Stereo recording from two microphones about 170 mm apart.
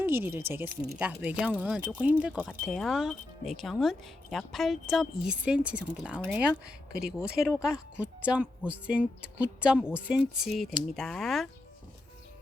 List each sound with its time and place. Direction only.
0.0 s speech: 10° right (ahead or behind)
0.7 s speech: 65° right (ahead or behind)
0.9 s speech: 10° right (ahead or behind)